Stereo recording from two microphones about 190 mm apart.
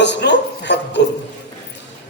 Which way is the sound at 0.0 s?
65° left (ahead or behind).